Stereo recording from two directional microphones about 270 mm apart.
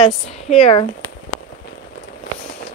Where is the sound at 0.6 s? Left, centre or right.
Left.